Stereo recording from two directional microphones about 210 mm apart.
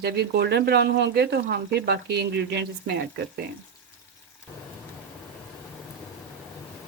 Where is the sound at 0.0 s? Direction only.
50° right (ahead or behind).